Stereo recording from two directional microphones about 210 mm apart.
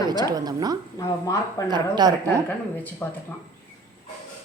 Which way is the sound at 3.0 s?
15° left (ahead or behind).